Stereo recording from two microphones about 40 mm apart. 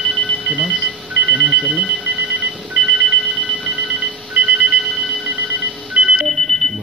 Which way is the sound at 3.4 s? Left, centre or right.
Right.